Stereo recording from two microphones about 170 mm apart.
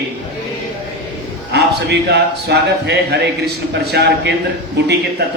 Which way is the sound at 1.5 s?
80° right.